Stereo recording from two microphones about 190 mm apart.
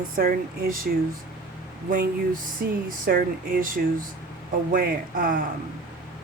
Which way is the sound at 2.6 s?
55° right (ahead or behind).